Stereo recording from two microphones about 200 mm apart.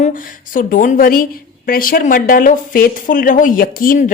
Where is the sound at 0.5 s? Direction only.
40° left (ahead or behind).